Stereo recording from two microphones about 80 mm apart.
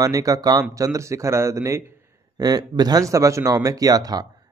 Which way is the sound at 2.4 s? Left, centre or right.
Right.